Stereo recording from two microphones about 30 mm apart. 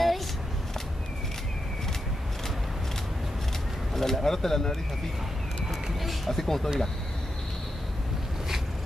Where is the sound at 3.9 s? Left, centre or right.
Centre.